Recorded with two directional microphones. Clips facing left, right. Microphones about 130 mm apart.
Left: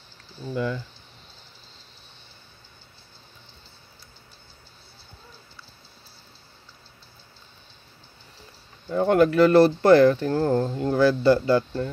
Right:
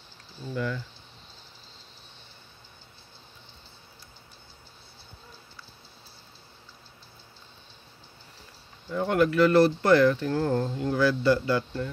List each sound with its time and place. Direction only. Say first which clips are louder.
0.6 s speech: left 4 dB; 25° left (ahead or behind)
8.8 s speech: left 5 dB; 40° left (ahead or behind)